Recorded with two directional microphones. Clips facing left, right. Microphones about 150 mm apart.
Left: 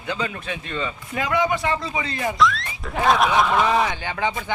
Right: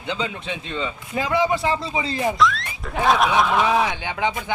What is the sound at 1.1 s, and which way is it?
A man's voice, 30° right (ahead or behind).